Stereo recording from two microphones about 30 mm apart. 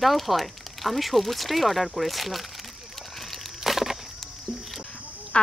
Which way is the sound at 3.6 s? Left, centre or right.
Centre.